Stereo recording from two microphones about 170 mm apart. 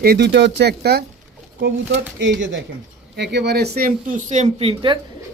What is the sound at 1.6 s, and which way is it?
A man's voice, 90° right.